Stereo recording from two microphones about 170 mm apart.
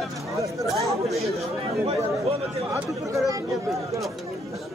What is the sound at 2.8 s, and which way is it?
Speech, 15° right (ahead or behind).